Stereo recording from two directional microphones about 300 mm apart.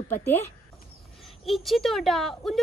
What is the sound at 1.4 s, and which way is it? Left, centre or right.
Speech, centre.